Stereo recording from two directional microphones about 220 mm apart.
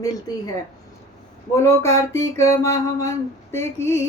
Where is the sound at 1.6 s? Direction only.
15° left (ahead or behind).